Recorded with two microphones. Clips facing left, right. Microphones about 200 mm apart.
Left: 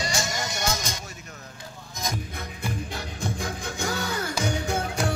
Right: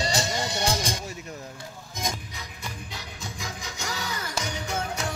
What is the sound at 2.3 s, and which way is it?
Music, 55° left (ahead or behind).